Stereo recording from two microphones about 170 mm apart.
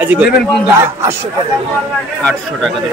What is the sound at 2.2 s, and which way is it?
Speech, 5° left (ahead or behind).